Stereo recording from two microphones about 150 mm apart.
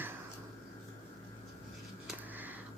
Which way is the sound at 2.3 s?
10° right (ahead or behind).